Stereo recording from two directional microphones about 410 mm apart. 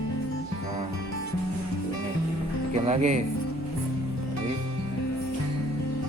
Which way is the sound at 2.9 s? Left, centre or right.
Centre.